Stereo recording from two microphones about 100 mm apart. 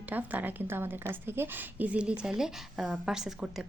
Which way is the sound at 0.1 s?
15° right (ahead or behind).